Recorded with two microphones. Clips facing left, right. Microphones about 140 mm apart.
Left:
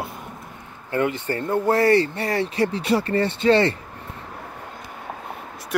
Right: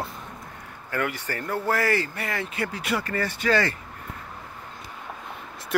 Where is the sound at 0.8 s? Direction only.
25° left (ahead or behind).